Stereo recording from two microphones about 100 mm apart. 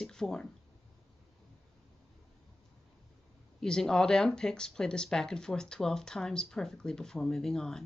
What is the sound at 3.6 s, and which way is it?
Speech, 5° left (ahead or behind).